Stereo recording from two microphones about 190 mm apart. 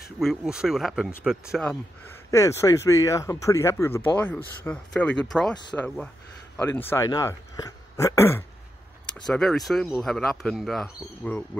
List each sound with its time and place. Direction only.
0.2 s speech: centre (ahead or behind)
9.3 s speech: centre (ahead or behind)